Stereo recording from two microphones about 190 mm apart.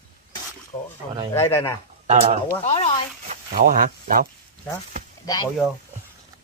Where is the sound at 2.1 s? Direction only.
35° right (ahead or behind).